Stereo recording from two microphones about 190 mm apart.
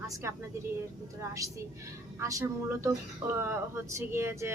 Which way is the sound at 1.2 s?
15° right (ahead or behind).